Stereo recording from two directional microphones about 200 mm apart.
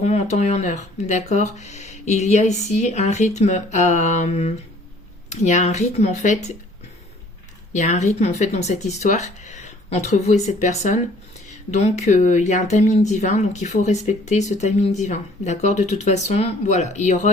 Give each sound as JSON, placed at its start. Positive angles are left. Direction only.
{"t": 0.0, "sound": "speech", "side_deg": 35}
{"t": 7.7, "sound": "speech", "side_deg": 35}